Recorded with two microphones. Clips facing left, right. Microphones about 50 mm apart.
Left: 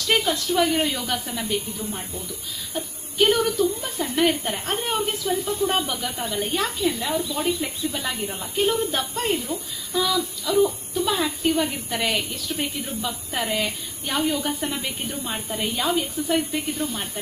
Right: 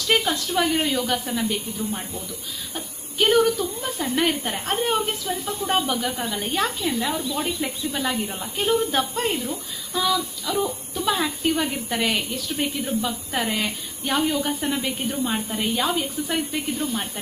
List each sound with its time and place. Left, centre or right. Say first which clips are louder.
0.1 s a woman's voice: even; centre
5.5 s speech: left 2 dB; right
5.7 s a woman's voice: right 2 dB; centre